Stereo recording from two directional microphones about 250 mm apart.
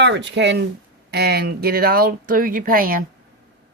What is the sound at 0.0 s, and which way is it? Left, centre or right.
Speech, right.